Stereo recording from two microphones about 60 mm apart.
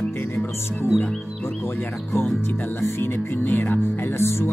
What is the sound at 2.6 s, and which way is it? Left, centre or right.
Music, left.